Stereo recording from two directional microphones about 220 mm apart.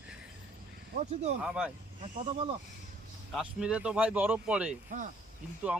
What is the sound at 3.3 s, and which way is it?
Speech, 5° right (ahead or behind).